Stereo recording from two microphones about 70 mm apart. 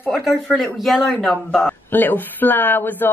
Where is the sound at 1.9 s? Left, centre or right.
Left.